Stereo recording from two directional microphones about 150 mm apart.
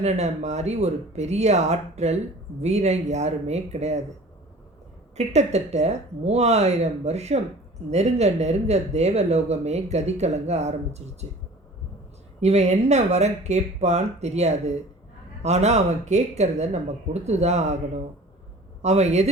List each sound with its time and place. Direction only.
0.0 s speech: 50° right (ahead or behind)
5.1 s speech: 45° right (ahead or behind)
12.4 s speech: 45° right (ahead or behind)
18.8 s speech: 50° right (ahead or behind)